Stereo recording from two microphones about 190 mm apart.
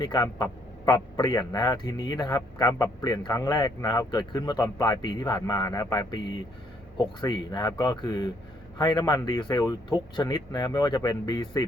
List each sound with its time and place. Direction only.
0.0 s speech: 20° left (ahead or behind)